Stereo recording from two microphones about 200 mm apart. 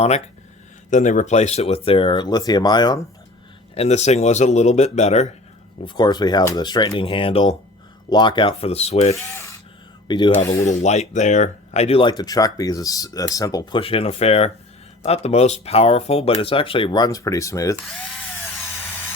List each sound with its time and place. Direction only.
0.9 s speech: 40° left (ahead or behind); by 3.0 s 20° left (ahead or behind)
3.8 s speech: 35° left (ahead or behind)
5.8 s speech: 25° left (ahead or behind)
10.3 s speech: 10° left (ahead or behind)
10.7 s speech: 35° left (ahead or behind); by 17.7 s 15° left (ahead or behind)